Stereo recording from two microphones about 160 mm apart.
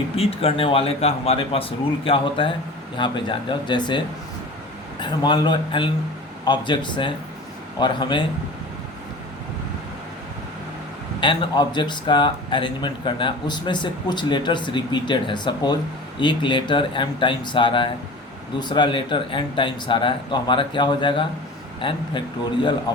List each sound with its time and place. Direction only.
0.2 s speech: 35° left (ahead or behind)
11.2 s speech: 30° left (ahead or behind)